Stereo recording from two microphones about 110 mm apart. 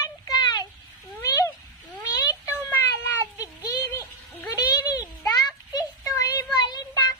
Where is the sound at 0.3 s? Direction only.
40° left (ahead or behind).